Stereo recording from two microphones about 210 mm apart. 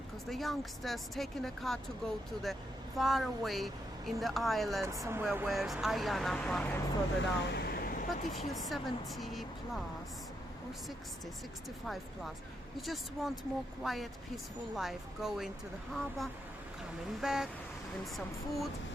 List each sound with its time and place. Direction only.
0.3 s speech: centre (ahead or behind)
4.8 s speech: 15° right (ahead or behind); by 6.7 s 5° left (ahead or behind)
7.2 s vehicle: 50° left (ahead or behind)
8.3 s speech: centre (ahead or behind)
12.8 s speech: centre (ahead or behind)